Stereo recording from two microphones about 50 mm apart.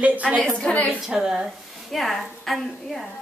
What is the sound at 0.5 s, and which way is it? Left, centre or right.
Speech, left.